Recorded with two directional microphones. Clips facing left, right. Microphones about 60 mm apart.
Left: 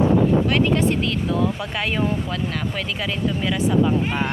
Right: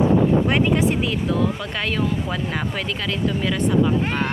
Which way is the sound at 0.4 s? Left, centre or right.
Centre.